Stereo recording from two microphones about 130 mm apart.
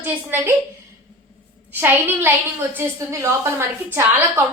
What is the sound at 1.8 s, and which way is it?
A woman's voice, 15° right (ahead or behind).